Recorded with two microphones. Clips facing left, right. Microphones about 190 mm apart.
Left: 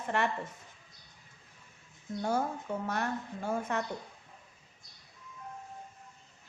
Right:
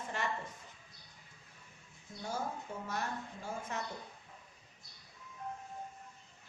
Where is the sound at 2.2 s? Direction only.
60° left (ahead or behind).